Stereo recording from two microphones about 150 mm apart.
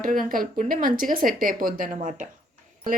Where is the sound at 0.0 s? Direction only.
65° right (ahead or behind).